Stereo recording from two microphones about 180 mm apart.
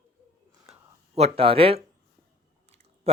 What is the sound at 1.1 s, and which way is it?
Speech, 35° right (ahead or behind).